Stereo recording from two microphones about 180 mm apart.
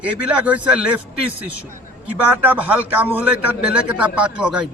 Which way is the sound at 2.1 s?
10° right (ahead or behind).